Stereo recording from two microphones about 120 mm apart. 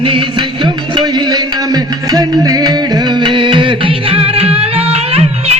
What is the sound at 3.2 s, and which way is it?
Music, 40° right (ahead or behind).